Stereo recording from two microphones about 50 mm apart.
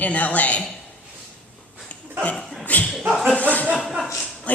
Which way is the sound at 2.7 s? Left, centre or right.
Left.